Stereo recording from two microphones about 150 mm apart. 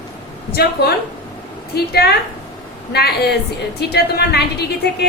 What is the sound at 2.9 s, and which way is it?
A woman's voice, 90° left.